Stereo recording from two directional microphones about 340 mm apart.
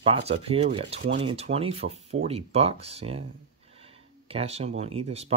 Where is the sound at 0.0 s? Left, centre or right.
Centre.